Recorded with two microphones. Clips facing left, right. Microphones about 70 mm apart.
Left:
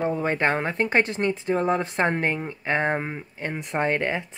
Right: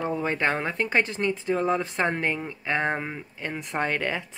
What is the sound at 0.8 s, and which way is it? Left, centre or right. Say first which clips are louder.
Speech: left 2 dB; left.